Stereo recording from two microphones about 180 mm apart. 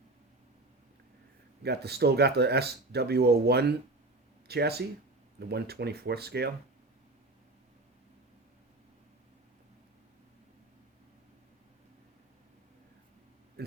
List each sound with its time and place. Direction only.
1.6 s speech: 65° right (ahead or behind)